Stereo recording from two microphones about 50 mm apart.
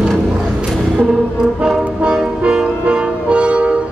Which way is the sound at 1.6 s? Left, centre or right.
Centre.